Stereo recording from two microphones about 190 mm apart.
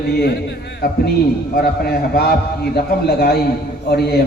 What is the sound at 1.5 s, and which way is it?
A man's voice, 55° left (ahead or behind).